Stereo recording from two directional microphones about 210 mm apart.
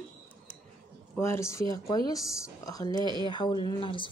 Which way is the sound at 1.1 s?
10° left (ahead or behind).